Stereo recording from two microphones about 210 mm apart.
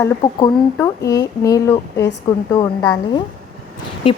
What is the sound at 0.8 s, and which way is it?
Speech, 15° left (ahead or behind).